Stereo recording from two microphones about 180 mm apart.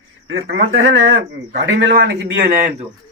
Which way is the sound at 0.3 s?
85° right.